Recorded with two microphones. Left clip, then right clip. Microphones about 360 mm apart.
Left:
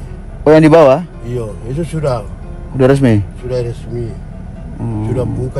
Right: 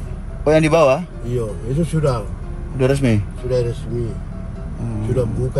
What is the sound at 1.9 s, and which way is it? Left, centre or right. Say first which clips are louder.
Speech: left 4 dB; centre.